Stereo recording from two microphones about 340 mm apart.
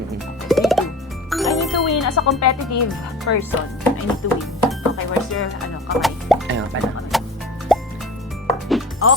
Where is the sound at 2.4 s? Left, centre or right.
Left.